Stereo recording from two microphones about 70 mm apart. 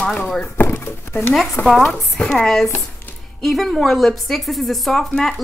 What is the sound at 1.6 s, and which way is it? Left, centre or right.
Speech, left.